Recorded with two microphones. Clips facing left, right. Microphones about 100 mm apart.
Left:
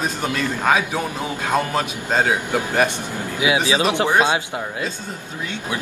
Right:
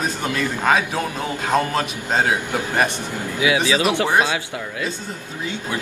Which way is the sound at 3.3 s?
25° left (ahead or behind).